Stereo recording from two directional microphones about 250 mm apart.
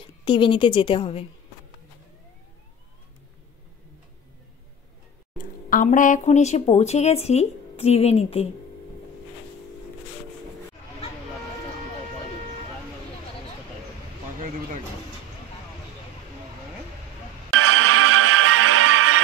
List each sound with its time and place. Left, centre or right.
0.2 s speech: centre
5.4 s speech: left
17.5 s music: right